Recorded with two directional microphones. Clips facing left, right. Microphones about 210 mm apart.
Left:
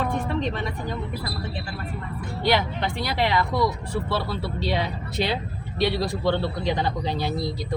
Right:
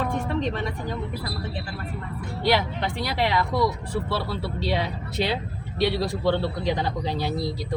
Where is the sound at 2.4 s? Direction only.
5° right (ahead or behind).